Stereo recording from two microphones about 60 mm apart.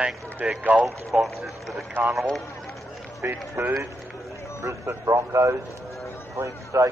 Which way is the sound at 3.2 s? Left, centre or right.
Right.